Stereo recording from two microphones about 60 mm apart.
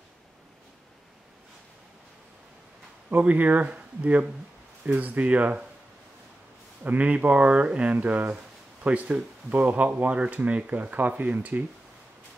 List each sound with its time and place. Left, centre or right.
3.1 s speech: right
6.8 s speech: right